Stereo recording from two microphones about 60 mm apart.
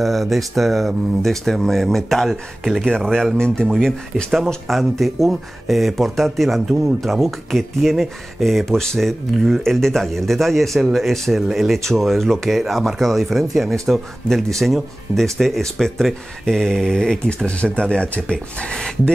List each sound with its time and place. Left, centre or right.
0.0 s speech: centre
4.6 s speech: centre